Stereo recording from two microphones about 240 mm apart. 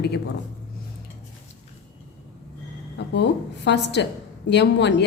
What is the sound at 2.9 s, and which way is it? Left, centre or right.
Speech, left.